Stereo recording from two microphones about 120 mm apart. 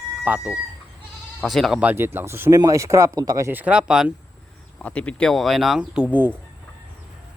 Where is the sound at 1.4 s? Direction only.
Centre (ahead or behind).